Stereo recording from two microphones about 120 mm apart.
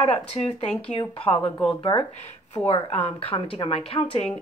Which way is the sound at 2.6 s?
60° left (ahead or behind).